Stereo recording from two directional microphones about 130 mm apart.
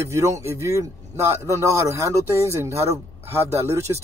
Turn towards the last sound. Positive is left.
turn(degrees=-20)  # may be behind; listen again after turning